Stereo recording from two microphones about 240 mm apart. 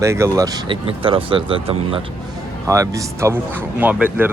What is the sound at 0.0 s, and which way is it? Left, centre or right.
Speech, centre.